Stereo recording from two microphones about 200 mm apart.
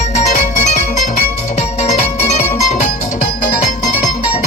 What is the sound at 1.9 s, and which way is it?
Music, 35° left (ahead or behind).